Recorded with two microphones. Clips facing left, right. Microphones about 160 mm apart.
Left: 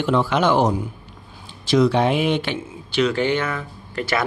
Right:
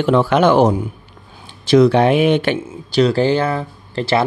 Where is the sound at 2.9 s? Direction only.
35° right (ahead or behind).